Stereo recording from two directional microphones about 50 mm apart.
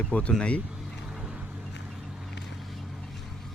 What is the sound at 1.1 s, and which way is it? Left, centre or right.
Vehicle, centre.